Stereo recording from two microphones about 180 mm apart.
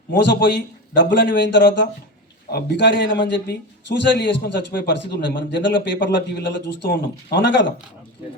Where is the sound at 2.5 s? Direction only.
65° left (ahead or behind).